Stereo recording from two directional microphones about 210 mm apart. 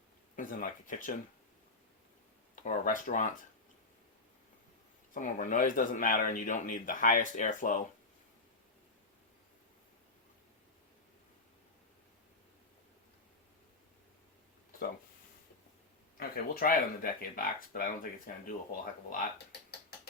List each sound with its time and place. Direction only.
0.3 s speech: 40° left (ahead or behind)
2.6 s speech: 40° left (ahead or behind)
5.1 s speech: 40° left (ahead or behind)
16.1 s speech: 45° left (ahead or behind)